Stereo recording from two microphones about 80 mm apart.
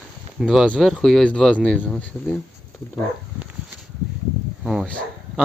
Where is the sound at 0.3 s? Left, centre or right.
Centre.